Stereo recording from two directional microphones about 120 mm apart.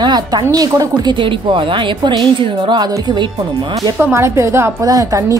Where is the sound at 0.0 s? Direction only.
35° right (ahead or behind).